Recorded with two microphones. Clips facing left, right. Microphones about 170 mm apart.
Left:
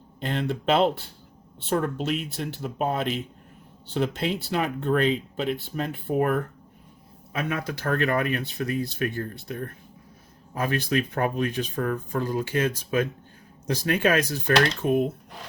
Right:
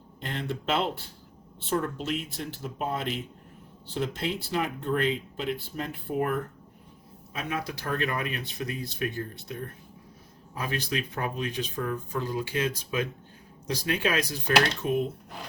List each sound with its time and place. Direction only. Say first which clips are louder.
0.3 s speech: left 6 dB; 65° left (ahead or behind); by 15.0 s 50° left (ahead or behind)